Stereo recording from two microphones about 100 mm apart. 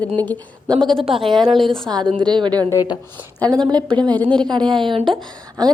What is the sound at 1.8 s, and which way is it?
A woman's voice, 45° right (ahead or behind).